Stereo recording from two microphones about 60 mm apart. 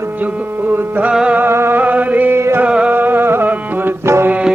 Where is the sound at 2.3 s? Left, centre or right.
Right.